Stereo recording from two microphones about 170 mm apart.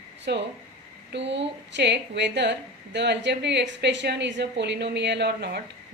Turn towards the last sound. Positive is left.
turn(degrees=-75)  # may be behind; listen again after turning